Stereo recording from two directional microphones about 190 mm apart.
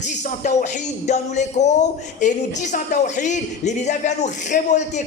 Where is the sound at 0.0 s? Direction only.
40° left (ahead or behind).